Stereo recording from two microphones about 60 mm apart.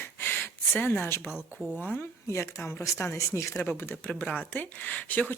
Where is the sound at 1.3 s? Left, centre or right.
Centre.